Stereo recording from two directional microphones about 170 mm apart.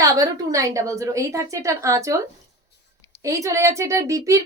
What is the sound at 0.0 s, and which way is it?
A woman's voice, 20° right (ahead or behind).